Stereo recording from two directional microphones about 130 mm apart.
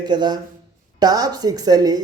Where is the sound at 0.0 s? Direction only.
35° right (ahead or behind).